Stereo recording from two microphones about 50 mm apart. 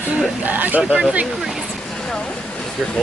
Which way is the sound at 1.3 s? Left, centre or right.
Centre.